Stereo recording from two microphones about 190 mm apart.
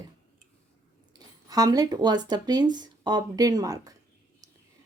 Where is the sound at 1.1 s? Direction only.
20° right (ahead or behind).